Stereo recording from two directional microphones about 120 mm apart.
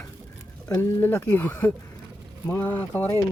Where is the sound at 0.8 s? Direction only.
15° left (ahead or behind).